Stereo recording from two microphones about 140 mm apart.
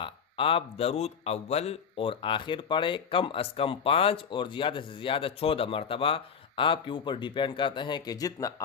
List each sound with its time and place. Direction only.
0.0 s speech: 40° left (ahead or behind); by 8.6 s 25° left (ahead or behind)